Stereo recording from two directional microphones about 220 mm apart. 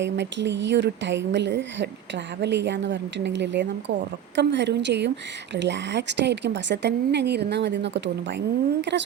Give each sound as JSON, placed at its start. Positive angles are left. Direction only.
{"t": 0.0, "sound": "a woman's voice", "side_deg": -55}